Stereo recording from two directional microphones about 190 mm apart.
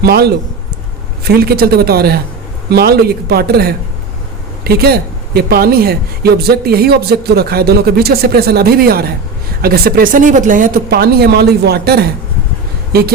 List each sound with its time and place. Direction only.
0.0 s speech: 60° right (ahead or behind)